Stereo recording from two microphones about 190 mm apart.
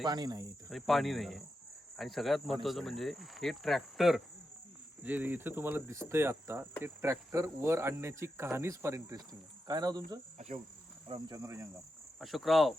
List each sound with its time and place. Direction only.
0.0 s cricket: 20° right (ahead or behind)
0.7 s speech: centre (ahead or behind)
5.0 s cricket: 10° right (ahead or behind)
10.3 s insect: 35° right (ahead or behind)
11.1 s cricket: 20° right (ahead or behind)
12.2 s speech: centre (ahead or behind)